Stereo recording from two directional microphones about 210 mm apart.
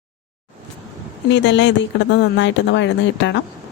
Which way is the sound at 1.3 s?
55° left (ahead or behind).